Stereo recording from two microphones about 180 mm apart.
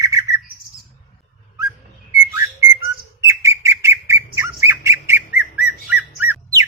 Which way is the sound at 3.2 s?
15° right (ahead or behind).